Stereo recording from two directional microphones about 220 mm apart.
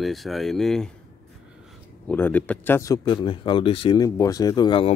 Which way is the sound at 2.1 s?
10° left (ahead or behind).